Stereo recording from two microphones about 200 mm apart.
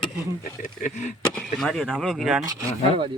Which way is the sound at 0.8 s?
40° left (ahead or behind).